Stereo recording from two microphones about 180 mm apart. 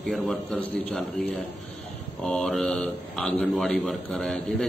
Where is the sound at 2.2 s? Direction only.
5° left (ahead or behind).